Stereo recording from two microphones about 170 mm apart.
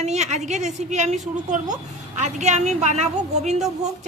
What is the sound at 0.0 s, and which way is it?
A woman's voice, 40° right (ahead or behind).